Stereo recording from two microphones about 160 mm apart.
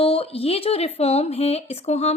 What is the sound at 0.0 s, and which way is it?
Speech, 35° left (ahead or behind).